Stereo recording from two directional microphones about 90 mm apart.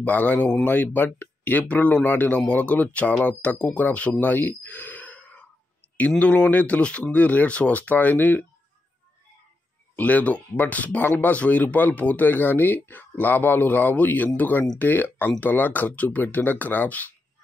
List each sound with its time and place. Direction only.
0.0 s speech: 15° left (ahead or behind)
4.2 s sigh: 20° left (ahead or behind)
5.9 s speech: 15° left (ahead or behind)
9.9 s speech: 15° left (ahead or behind)